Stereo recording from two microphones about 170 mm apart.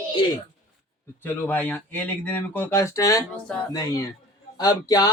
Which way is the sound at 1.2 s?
10° left (ahead or behind).